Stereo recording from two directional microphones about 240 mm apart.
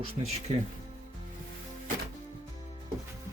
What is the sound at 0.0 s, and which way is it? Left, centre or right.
Speech, right.